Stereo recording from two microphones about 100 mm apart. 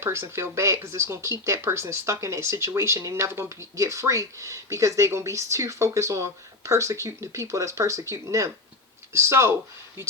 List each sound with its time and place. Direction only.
0.0 s speech: 25° right (ahead or behind)